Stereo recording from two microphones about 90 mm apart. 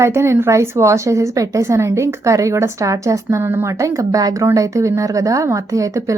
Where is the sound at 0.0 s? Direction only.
30° right (ahead or behind).